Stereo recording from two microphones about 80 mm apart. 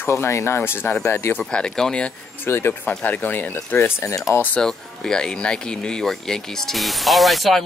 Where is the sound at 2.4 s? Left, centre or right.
Left.